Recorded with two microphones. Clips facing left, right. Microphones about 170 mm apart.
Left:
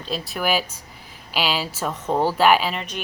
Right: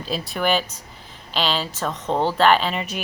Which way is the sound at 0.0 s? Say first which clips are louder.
Right 2 dB; centre (ahead or behind).